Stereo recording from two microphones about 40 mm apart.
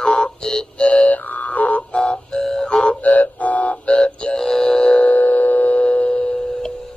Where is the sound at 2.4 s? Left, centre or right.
Centre.